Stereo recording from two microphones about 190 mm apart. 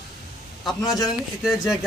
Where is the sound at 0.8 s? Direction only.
20° left (ahead or behind).